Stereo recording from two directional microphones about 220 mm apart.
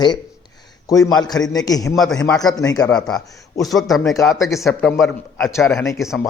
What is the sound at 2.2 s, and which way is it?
Speech, 15° left (ahead or behind).